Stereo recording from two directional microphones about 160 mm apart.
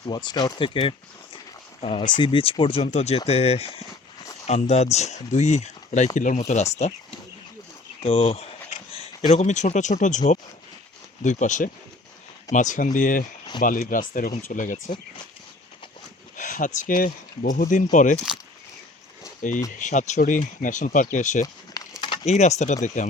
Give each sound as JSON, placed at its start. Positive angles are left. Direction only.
{"t": 0.0, "sound": "speech", "side_deg": 25}
{"t": 8.0, "sound": "speech", "side_deg": 40}
{"t": 16.4, "sound": "speech", "side_deg": 55}
{"t": 19.4, "sound": "speech", "side_deg": 50}
{"t": 21.4, "sound": "a sound", "side_deg": 25}
{"t": 22.3, "sound": "speech", "side_deg": 45}